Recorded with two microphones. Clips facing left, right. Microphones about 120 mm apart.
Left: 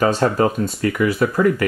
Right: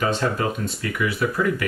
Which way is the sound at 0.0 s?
40° left (ahead or behind).